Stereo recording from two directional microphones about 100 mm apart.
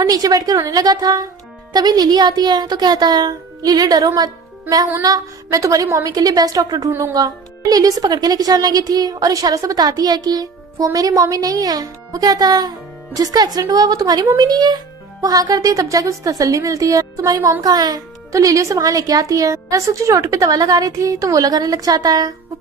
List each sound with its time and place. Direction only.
0.0 s a woman's voice: 40° right (ahead or behind)